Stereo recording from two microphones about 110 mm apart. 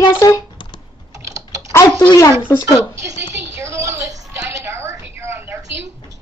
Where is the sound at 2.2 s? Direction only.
15° left (ahead or behind).